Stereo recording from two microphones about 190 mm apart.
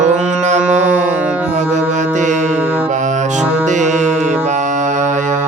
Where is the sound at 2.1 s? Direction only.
40° right (ahead or behind).